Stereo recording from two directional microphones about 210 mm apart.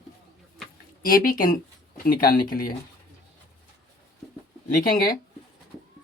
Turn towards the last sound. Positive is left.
turn(degrees=40)  # may be behind; listen again after turning